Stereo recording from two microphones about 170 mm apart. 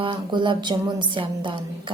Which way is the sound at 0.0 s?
30° right (ahead or behind).